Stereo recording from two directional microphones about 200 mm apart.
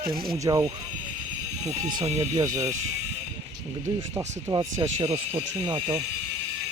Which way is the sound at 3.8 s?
15° right (ahead or behind).